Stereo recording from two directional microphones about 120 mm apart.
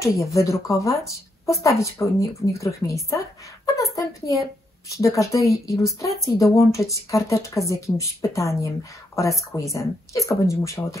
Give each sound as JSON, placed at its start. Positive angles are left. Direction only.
{"t": 0.0, "sound": "speech", "side_deg": 25}